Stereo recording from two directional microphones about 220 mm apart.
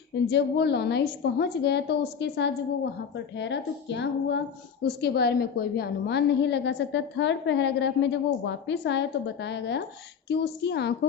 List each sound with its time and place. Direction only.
0.3 s a woman's voice: 50° left (ahead or behind)